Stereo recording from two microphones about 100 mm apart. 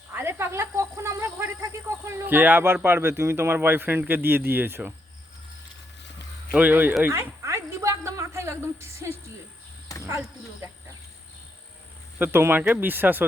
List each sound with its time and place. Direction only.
0.1 s speech: 25° right (ahead or behind)
6.5 s speech: 15° right (ahead or behind)
7.1 s a sound: 30° right (ahead or behind)
9.0 s speech: 30° right (ahead or behind)
10.0 s snake: 30° right (ahead or behind)
12.2 s speech: 25° right (ahead or behind)